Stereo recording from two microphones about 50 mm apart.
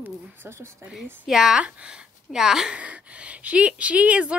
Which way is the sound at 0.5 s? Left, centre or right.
Right.